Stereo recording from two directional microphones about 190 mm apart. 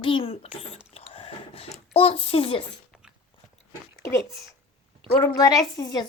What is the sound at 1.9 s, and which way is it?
Speech, 30° left (ahead or behind).